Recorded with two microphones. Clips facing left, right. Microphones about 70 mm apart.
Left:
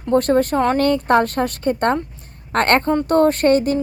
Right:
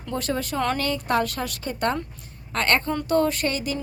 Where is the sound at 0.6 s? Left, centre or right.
Left.